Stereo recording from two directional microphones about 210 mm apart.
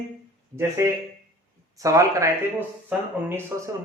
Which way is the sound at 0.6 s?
15° right (ahead or behind).